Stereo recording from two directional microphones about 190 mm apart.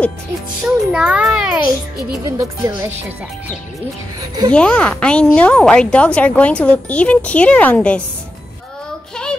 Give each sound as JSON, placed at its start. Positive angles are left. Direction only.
{"t": 0.7, "sound": "a child's voice", "side_deg": -5}
{"t": 2.2, "sound": "speech", "side_deg": -20}
{"t": 4.5, "sound": "speech", "side_deg": 5}